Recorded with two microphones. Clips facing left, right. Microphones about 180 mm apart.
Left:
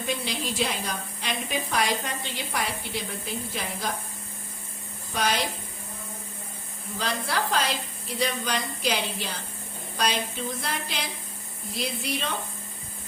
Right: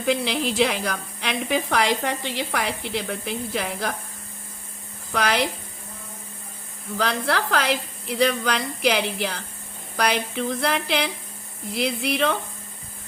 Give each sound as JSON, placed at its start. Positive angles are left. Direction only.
{"t": 0.0, "sound": "a woman's voice", "side_deg": -75}
{"t": 5.1, "sound": "a woman's voice", "side_deg": -65}
{"t": 7.0, "sound": "a woman's voice", "side_deg": -70}